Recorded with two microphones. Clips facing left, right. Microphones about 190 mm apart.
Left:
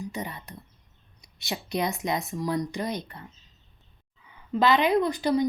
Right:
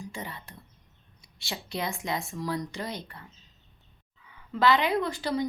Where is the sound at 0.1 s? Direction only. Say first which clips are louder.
Left 4 dB; 20° left (ahead or behind).